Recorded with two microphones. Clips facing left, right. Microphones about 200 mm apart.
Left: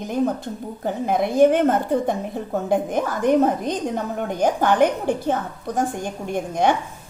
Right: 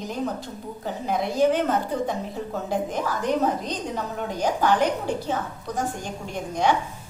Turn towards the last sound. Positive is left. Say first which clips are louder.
# left 3 dB
turn(degrees=55)  # may be behind; listen again after turning